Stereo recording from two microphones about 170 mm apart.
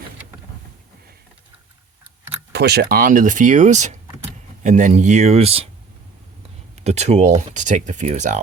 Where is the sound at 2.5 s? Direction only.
75° right (ahead or behind); by 5.7 s 35° right (ahead or behind).